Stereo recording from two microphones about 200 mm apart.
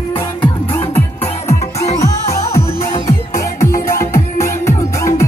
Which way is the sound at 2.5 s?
15° left (ahead or behind).